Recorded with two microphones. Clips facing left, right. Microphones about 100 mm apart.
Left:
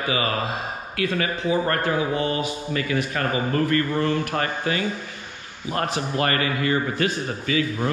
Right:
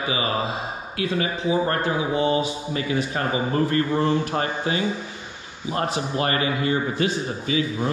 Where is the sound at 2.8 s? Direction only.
20° right (ahead or behind).